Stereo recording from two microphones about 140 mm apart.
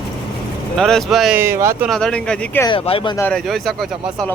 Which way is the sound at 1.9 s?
5° left (ahead or behind).